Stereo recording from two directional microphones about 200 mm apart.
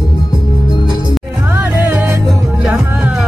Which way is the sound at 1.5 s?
10° right (ahead or behind).